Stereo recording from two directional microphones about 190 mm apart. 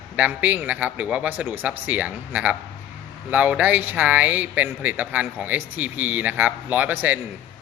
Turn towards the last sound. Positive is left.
turn(degrees=-10)  # may be behind; listen again after turning